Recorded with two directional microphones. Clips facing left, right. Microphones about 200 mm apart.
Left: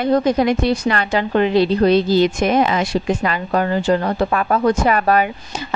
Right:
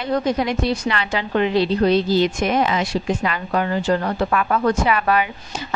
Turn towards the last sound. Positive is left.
turn(degrees=40)  # may be behind; listen again after turning